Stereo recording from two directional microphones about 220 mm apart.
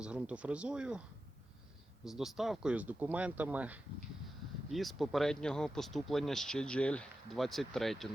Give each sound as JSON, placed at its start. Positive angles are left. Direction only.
{"t": 0.0, "sound": "speech", "side_deg": -5}
{"t": 2.0, "sound": "speech", "side_deg": 0}